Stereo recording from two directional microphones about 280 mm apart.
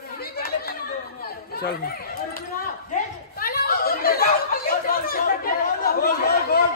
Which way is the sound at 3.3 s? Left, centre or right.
Left.